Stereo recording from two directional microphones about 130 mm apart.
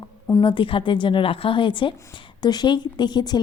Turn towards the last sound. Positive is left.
turn(degrees=35)  # may be behind; listen again after turning